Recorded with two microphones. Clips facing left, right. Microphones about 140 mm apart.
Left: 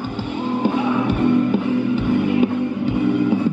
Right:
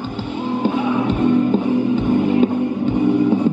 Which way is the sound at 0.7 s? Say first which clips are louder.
Right 1 dB; 15° right (ahead or behind).